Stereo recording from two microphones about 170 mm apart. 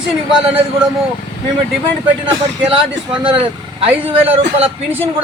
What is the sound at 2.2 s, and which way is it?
Speech, 30° right (ahead or behind).